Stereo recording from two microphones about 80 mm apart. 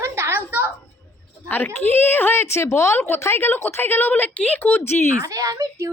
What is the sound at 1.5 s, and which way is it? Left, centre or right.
A woman's voice, left.